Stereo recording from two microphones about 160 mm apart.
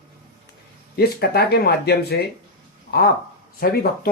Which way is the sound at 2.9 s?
75° left (ahead or behind).